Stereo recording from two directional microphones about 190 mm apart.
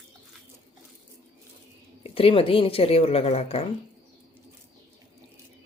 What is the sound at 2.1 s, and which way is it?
Speech, 30° left (ahead or behind).